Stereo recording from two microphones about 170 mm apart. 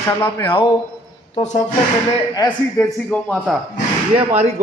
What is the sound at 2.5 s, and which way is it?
Speech, 5° left (ahead or behind).